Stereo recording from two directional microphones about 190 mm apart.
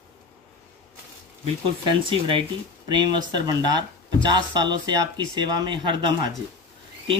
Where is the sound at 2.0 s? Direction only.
25° right (ahead or behind).